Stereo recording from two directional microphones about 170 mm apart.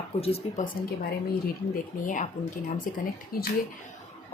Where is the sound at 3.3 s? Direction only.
60° left (ahead or behind).